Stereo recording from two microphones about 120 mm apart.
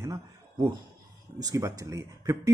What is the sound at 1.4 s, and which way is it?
A man's voice, 30° right (ahead or behind).